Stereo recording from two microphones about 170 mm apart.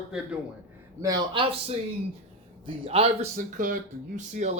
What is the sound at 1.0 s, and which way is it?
Speech, 20° right (ahead or behind).